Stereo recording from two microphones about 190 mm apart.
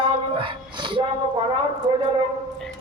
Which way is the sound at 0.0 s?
25° right (ahead or behind).